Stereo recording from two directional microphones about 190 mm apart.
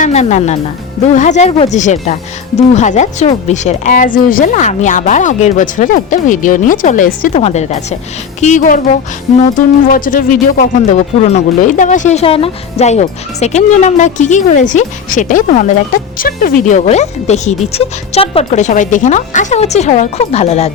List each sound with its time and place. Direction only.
0.0 s speech: 35° left (ahead or behind)
9.9 s speech: 45° left (ahead or behind)